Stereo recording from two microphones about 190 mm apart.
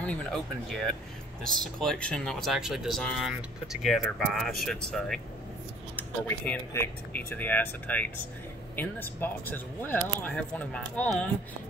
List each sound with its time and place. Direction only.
0.0 s speech: 5° left (ahead or behind)